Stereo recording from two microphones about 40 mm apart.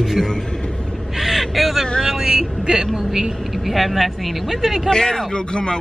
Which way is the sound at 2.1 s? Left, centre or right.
Centre.